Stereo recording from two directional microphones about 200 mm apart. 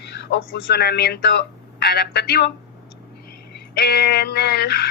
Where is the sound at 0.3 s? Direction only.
55° left (ahead or behind).